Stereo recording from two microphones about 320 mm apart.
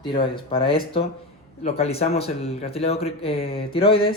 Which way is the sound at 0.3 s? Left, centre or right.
Centre.